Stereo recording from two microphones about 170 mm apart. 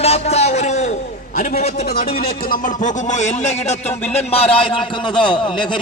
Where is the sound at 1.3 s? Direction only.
55° left (ahead or behind).